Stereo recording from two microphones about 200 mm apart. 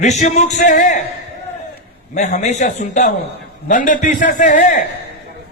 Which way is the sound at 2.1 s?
35° left (ahead or behind).